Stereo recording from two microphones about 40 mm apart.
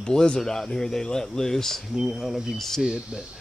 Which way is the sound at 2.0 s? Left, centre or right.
Centre.